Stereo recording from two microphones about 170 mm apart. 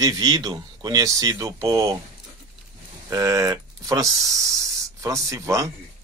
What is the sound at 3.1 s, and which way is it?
Speech, 20° right (ahead or behind).